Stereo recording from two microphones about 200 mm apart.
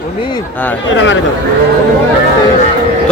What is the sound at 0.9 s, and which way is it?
Speech, 65° left (ahead or behind).